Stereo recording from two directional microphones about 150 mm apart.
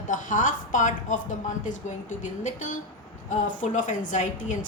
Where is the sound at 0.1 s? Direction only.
60° left (ahead or behind).